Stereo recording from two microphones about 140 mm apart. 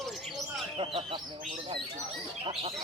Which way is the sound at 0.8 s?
40° right (ahead or behind).